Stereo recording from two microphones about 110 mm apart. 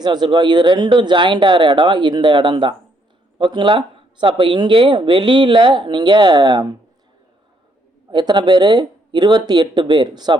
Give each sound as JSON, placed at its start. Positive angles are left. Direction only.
{"t": 0.0, "sound": "speech", "side_deg": -40}
{"t": 8.1, "sound": "speech", "side_deg": -45}